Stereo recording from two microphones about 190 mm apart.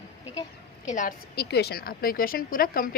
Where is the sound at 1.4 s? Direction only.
60° left (ahead or behind).